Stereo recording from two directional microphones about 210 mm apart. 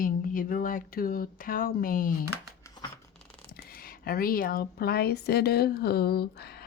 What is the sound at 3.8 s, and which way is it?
Speech, 45° left (ahead or behind).